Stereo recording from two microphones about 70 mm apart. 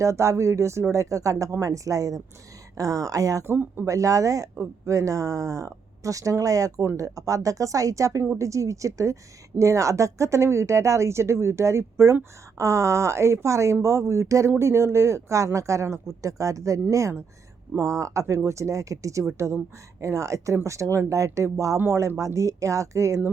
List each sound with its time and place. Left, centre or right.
0.0 s speech: right
3.4 s speech: right
3.8 s speech: right